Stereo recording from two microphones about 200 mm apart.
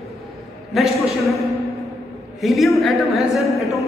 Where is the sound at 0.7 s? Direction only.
Centre (ahead or behind).